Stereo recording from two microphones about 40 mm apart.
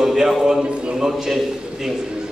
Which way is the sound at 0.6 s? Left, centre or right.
Right.